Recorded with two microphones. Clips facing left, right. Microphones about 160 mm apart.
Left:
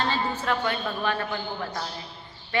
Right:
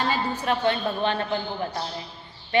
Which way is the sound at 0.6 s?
25° right (ahead or behind).